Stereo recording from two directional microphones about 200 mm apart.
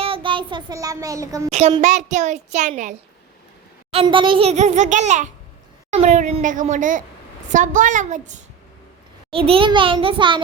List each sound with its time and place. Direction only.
0.0 s child singing: 25° right (ahead or behind)
1.5 s a child's voice: 30° right (ahead or behind)
3.9 s a child's voice: 25° right (ahead or behind)
9.3 s a child's voice: 30° right (ahead or behind)